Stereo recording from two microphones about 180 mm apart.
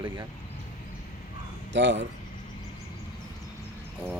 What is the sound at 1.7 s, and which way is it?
Speech, 85° right.